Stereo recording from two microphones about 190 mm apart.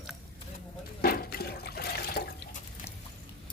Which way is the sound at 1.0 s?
55° left (ahead or behind).